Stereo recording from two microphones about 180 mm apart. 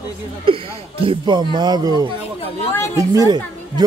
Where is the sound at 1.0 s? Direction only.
25° right (ahead or behind).